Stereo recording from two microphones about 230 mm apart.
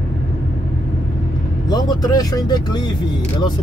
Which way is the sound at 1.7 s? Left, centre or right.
Centre.